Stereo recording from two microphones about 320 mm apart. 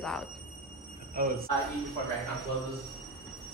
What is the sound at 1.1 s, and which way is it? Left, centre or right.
Speech, right.